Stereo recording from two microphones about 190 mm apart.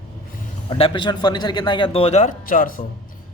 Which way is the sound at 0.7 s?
25° left (ahead or behind).